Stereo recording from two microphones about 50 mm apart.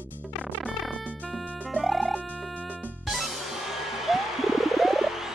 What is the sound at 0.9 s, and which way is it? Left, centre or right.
Music, left.